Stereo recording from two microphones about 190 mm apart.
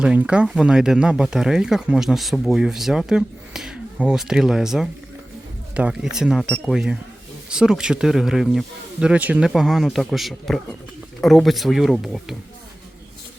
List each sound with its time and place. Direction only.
0.0 s speech: 5° right (ahead or behind)